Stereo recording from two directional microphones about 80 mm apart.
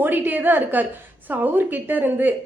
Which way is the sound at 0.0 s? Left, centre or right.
Right.